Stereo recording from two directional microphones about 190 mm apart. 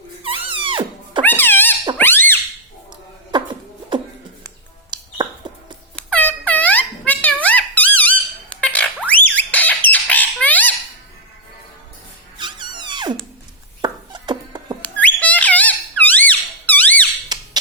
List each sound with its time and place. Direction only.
0.2 s music: 25° right (ahead or behind)
1.2 s a sound: 10° left (ahead or behind)
2.0 s squeak: 10° left (ahead or behind)
3.3 s beatboxing: 25° right (ahead or behind)
4.9 s a sound: 25° right (ahead or behind)
6.0 s air horn: 5° left (ahead or behind)
7.4 s a sound: 10° left (ahead or behind)
9.5 s squawk: 10° left (ahead or behind)
12.4 s music: 25° right (ahead or behind)
13.8 s chopping: 25° right (ahead or behind)
14.8 s squeak: 5° left (ahead or behind)
17.3 s squawk: 20° right (ahead or behind)